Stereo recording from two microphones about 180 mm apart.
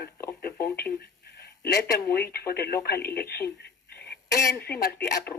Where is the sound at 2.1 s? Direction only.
60° left (ahead or behind).